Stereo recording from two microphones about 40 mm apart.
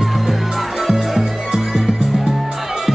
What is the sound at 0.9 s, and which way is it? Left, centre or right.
Music, centre.